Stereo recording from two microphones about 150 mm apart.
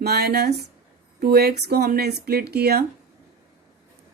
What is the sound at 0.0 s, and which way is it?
Speech, 90° right.